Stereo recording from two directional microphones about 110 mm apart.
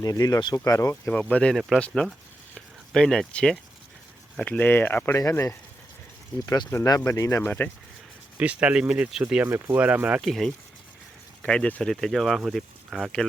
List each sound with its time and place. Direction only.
0.0 s speech: 35° left (ahead or behind)
1.3 s speech: 10° left (ahead or behind)
1.9 s speech: centre (ahead or behind); by 7.7 s 20° left (ahead or behind)
8.4 s speech: 10° right (ahead or behind)
10.2 s speech: centre (ahead or behind)